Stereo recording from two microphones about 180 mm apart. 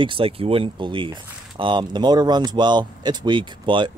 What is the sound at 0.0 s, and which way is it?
Speech, 30° right (ahead or behind).